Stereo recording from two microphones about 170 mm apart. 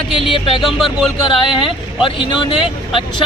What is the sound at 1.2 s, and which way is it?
Speech, 30° left (ahead or behind).